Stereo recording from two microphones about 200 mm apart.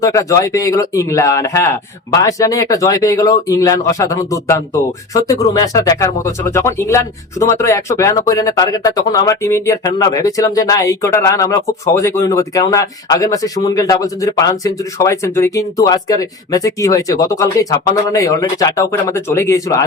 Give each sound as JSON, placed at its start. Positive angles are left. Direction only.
{"t": 0.0, "sound": "speech", "side_deg": 15}